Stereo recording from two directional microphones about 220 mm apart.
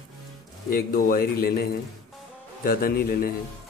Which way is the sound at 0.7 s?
40° left (ahead or behind).